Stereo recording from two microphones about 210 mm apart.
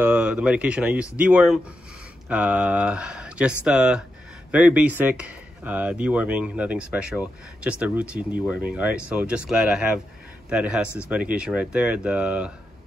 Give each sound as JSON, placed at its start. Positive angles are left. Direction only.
{"t": 0.0, "sound": "speech", "side_deg": -10}